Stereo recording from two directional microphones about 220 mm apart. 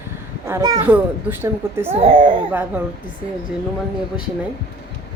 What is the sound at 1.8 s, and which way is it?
Speech, 25° right (ahead or behind).